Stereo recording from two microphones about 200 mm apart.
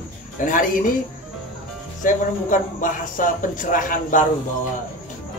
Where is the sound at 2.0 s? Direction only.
40° left (ahead or behind).